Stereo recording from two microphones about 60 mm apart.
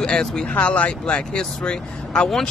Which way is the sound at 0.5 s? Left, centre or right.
Left.